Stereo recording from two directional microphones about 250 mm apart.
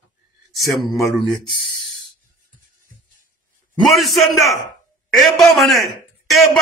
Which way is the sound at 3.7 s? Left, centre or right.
Centre.